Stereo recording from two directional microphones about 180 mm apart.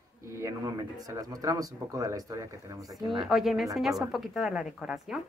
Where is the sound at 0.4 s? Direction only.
15° right (ahead or behind).